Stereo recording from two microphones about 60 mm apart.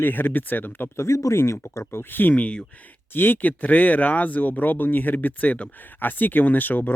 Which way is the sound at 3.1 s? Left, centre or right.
Left.